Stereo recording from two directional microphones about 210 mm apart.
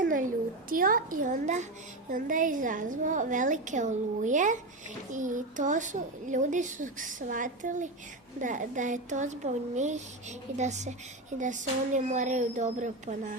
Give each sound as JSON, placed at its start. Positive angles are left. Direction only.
{"t": 0.7, "sound": "speech", "side_deg": -40}